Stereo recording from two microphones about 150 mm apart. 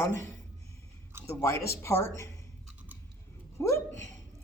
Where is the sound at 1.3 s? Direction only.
15° left (ahead or behind).